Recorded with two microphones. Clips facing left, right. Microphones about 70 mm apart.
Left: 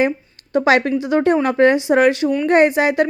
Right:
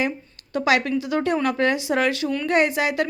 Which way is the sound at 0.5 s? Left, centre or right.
Left.